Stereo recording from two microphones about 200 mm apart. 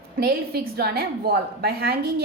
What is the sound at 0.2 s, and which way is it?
Speech, 50° right (ahead or behind).